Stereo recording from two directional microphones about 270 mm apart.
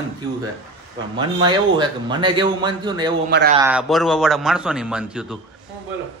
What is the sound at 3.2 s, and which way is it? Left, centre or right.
Speech, right.